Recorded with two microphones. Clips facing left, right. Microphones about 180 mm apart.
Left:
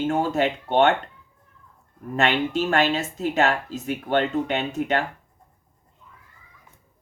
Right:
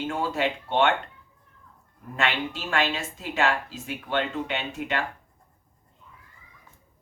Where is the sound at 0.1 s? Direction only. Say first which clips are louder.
Left 5 dB; 45° left (ahead or behind).